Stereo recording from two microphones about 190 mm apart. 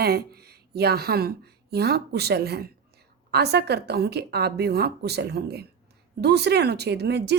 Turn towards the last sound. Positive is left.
turn(degrees=-60)  # may be behind; listen again after turning